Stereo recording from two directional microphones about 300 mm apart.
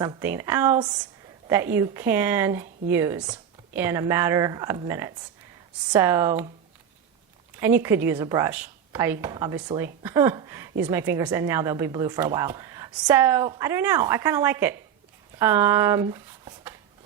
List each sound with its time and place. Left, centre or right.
0.0 s a woman's voice: centre
7.5 s a woman's voice: centre